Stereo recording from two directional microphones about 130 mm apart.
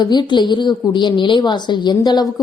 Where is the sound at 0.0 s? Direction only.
35° left (ahead or behind).